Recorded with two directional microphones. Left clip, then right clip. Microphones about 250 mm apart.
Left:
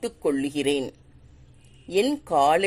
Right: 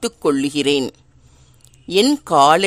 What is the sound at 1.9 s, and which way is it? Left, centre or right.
Speech, right.